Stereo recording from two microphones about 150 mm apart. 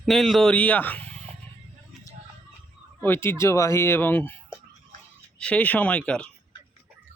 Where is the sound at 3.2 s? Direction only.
20° left (ahead or behind).